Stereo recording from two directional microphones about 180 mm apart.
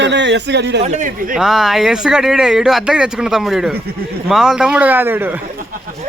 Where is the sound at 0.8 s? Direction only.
40° right (ahead or behind).